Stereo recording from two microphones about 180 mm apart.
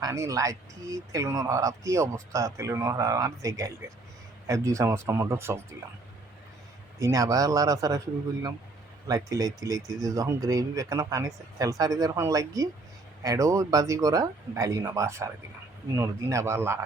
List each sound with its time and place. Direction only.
0.0 s speech: 15° right (ahead or behind)
7.0 s speech: 20° right (ahead or behind)